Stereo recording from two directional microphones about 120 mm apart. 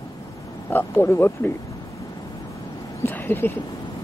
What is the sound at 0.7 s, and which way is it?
Speech, 15° left (ahead or behind).